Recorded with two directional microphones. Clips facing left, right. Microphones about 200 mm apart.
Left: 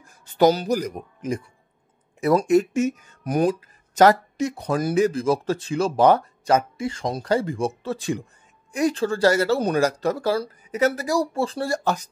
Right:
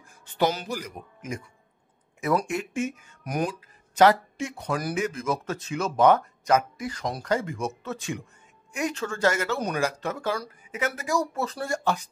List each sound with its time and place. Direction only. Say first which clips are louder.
0.2 s speech: left 8 dB; 35° left (ahead or behind)